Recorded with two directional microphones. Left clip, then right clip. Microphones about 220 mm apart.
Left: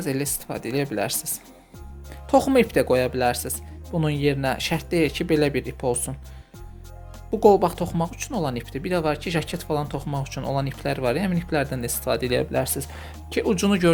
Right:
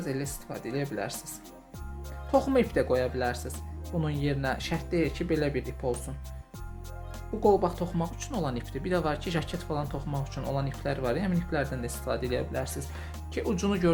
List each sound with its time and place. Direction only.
0.0 s speech: 35° left (ahead or behind)
7.3 s speech: 35° left (ahead or behind)